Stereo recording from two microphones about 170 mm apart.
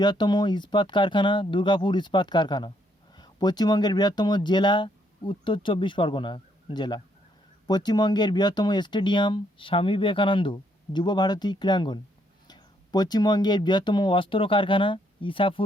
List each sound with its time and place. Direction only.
0.0 s speech: 25° left (ahead or behind)